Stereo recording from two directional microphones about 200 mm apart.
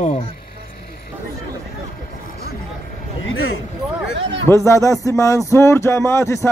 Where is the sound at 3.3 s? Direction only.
90° left.